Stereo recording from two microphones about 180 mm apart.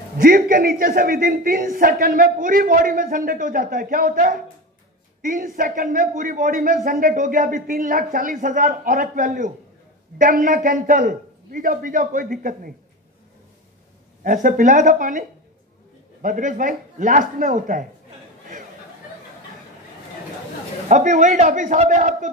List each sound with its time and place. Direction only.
0.2 s a man's voice: 55° right (ahead or behind)
14.2 s a man's voice: 45° right (ahead or behind)
20.9 s a man's voice: 45° right (ahead or behind)